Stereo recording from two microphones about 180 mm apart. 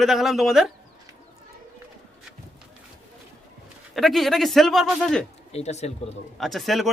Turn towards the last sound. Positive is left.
turn(degrees=0)  # may be behind; listen again after turning